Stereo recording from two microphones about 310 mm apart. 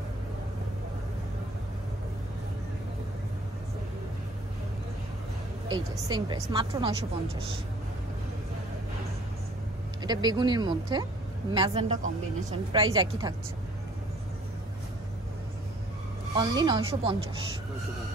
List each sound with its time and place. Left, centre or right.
5.7 s a woman's voice: centre
10.0 s a woman's voice: centre
16.3 s a woman's voice: centre